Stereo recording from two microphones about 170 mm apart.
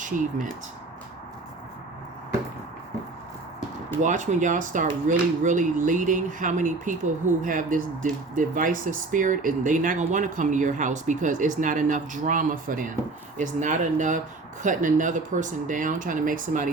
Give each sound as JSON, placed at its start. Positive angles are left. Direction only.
{"t": 0.0, "sound": "speech", "side_deg": -50}
{"t": 4.0, "sound": "speech", "side_deg": -45}